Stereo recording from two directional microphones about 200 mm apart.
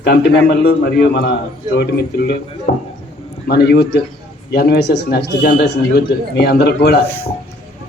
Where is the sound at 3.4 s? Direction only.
55° left (ahead or behind).